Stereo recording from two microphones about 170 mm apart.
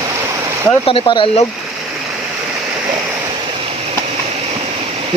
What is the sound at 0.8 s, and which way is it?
Speech, 30° left (ahead or behind).